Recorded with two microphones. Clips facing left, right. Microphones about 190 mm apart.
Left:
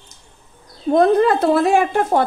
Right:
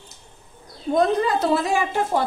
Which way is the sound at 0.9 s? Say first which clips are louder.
Left 6 dB; 55° left (ahead or behind).